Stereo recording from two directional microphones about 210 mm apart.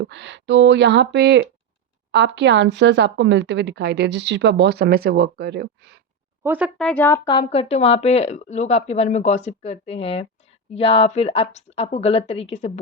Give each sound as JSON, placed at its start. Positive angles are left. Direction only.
{"t": 0.0, "sound": "a woman's voice", "side_deg": -55}
{"t": 6.4, "sound": "speech", "side_deg": -10}
{"t": 6.7, "sound": "a woman's voice", "side_deg": 5}